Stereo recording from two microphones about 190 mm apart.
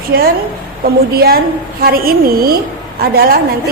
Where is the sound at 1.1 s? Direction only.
55° right (ahead or behind).